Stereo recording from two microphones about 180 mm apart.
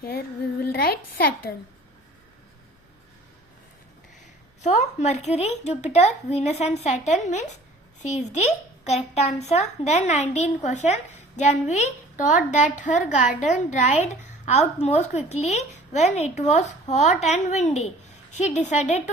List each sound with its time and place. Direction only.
0.0 s a woman's voice: 60° left (ahead or behind)
4.6 s speech: 40° left (ahead or behind)